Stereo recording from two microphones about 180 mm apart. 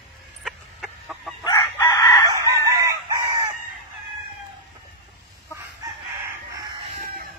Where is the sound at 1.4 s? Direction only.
20° left (ahead or behind).